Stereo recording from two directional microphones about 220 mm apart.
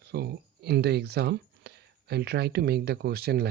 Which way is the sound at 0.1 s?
50° right (ahead or behind).